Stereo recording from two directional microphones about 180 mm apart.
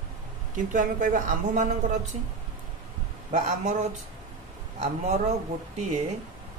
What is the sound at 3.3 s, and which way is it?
A man's voice, 40° right (ahead or behind).